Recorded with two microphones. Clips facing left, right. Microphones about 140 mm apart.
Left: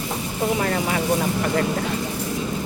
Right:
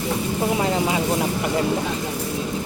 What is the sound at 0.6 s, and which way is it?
Speech, 20° right (ahead or behind).